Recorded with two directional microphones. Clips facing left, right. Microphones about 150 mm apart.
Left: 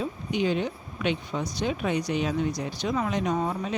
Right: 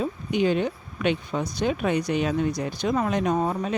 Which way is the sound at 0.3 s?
50° right (ahead or behind).